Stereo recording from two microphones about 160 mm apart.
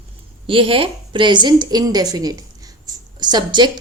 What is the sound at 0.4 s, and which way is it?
A woman's voice, 35° right (ahead or behind).